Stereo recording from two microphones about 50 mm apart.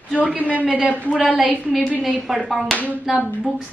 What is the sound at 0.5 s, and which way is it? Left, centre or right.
Speech, right.